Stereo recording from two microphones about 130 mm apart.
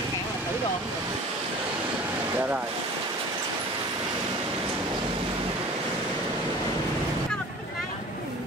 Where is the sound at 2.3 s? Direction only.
15° right (ahead or behind).